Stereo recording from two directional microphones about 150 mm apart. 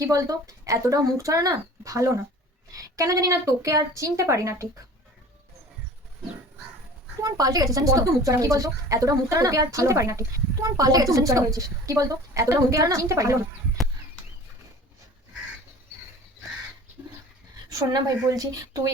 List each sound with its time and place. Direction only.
0.0 s a woman's voice: 20° right (ahead or behind)
7.2 s a woman's voice: 25° right (ahead or behind)
17.7 s a woman's voice: 25° right (ahead or behind)